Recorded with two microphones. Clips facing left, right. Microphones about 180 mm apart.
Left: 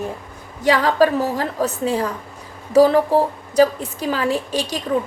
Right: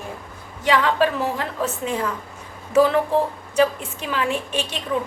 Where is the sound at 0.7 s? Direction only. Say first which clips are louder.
Left 3 dB; 40° left (ahead or behind).